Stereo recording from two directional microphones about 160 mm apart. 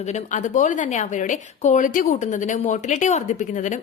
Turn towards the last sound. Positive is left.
turn(degrees=50)  # may be behind; listen again after turning